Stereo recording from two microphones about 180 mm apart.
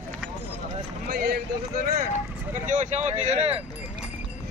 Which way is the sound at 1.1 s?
60° right (ahead or behind).